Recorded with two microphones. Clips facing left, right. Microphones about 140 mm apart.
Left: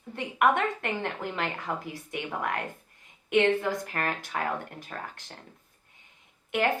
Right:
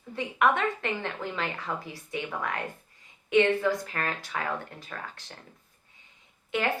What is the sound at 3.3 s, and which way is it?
A woman's voice, 55° left (ahead or behind).